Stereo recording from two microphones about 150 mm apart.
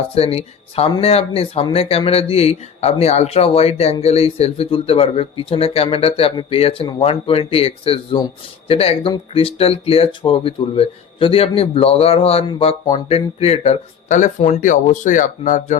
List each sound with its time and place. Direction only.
0.1 s speech: 40° left (ahead or behind)